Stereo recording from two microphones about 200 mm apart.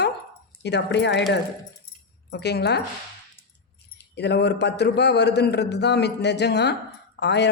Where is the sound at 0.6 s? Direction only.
60° left (ahead or behind).